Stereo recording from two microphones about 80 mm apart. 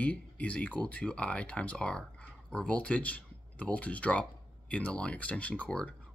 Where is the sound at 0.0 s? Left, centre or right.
Centre.